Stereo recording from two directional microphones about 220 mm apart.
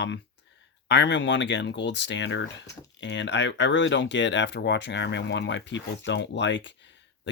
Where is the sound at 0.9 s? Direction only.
55° left (ahead or behind).